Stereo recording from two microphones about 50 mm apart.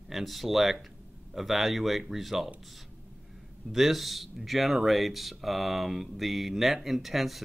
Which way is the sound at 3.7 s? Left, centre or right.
Centre.